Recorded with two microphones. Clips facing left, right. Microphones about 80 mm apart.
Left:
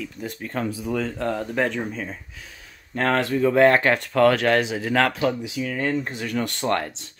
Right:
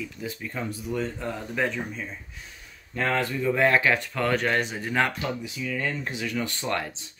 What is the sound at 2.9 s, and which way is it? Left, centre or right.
Speech, left.